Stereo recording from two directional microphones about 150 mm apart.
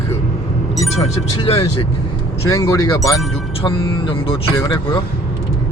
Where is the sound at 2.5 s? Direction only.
20° left (ahead or behind).